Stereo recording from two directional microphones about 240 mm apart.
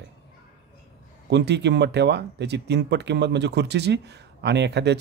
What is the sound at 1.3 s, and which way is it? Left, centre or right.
A man's voice, right.